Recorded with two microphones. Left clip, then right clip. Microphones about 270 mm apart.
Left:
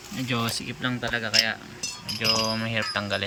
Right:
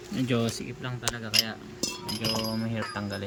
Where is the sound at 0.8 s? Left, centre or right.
Left; by 3.2 s centre.